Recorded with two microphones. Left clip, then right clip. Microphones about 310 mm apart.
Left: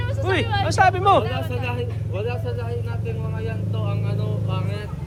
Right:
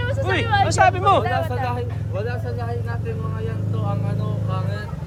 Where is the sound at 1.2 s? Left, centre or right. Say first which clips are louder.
Right 5 dB; right.